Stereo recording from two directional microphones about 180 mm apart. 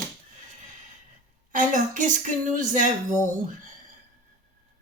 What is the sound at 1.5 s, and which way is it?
Mantra, 45° right (ahead or behind).